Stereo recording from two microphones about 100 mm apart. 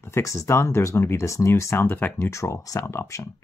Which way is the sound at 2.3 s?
30° left (ahead or behind).